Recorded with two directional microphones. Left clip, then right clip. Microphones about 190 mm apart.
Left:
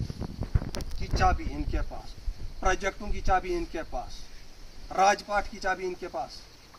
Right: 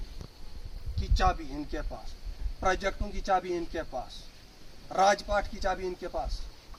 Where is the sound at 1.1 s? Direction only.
15° right (ahead or behind).